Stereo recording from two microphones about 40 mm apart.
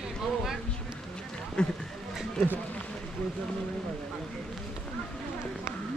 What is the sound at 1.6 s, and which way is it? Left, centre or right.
Speech, left.